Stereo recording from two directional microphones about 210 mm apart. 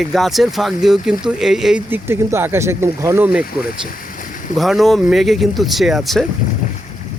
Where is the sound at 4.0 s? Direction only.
40° left (ahead or behind).